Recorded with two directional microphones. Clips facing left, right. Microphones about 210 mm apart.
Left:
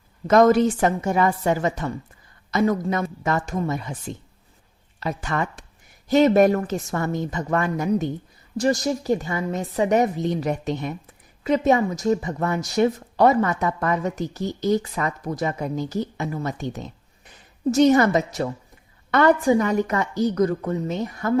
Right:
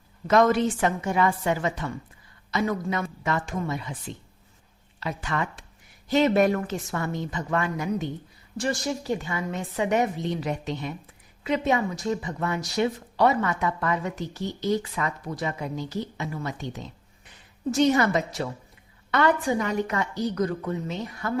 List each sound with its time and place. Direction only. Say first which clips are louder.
0.3 s a woman's voice: left 5 dB; 40° left (ahead or behind)
4.9 s a woman's voice: left 3 dB; 40° left (ahead or behind)